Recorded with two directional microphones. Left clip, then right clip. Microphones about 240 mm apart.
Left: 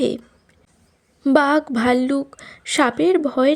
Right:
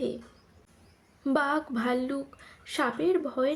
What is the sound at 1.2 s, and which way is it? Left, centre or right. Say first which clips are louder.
A woman's voice: left 11 dB; left.